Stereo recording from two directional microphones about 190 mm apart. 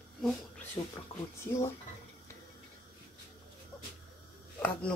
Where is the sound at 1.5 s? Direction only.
15° left (ahead or behind).